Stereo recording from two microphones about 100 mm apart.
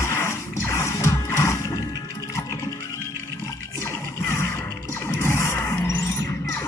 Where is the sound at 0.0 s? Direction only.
25° left (ahead or behind).